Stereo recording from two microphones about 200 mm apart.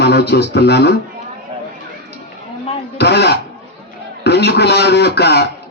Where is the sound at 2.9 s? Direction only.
55° left (ahead or behind).